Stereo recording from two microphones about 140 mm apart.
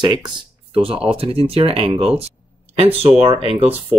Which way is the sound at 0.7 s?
40° right (ahead or behind).